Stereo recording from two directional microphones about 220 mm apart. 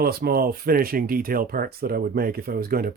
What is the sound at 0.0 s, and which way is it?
Speech, 45° right (ahead or behind).